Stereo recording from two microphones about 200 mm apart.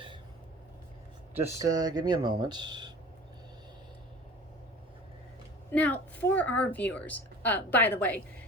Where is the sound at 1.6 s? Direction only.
20° right (ahead or behind).